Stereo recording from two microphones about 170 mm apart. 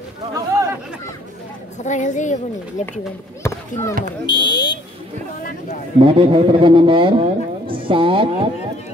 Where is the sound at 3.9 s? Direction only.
55° right (ahead or behind).